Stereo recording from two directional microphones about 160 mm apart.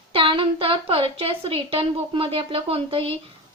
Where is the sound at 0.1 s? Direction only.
35° right (ahead or behind).